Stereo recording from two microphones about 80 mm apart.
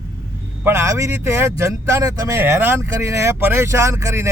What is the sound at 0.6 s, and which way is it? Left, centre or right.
Speech, right.